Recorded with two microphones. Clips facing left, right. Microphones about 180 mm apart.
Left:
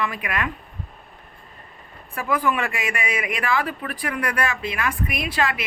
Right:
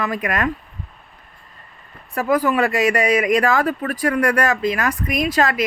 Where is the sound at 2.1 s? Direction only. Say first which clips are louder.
Right 5 dB; 40° right (ahead or behind).